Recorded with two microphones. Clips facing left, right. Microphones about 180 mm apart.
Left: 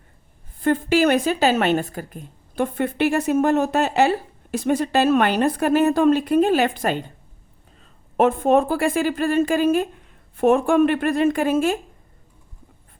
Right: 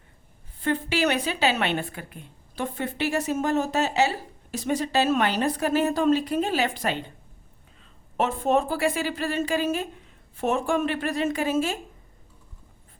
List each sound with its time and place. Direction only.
0.6 s speech: 45° left (ahead or behind)